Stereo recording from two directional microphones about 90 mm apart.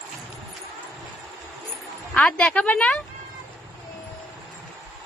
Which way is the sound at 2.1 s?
10° left (ahead or behind).